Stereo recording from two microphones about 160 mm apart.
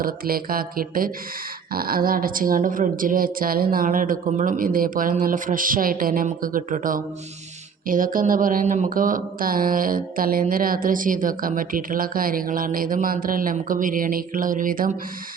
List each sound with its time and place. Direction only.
0.0 s mantra: 65° right (ahead or behind)